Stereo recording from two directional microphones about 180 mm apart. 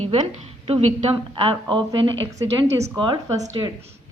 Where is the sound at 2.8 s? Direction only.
25° right (ahead or behind).